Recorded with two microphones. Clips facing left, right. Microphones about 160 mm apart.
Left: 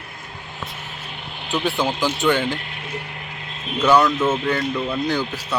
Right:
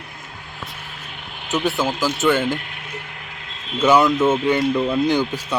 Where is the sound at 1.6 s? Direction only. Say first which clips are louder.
Even; 5° right (ahead or behind).